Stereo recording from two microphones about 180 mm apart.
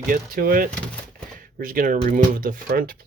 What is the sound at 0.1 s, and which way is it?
Speech, 55° right (ahead or behind).